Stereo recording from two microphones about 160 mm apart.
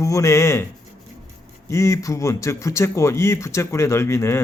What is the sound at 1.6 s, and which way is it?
A man's voice, 20° left (ahead or behind).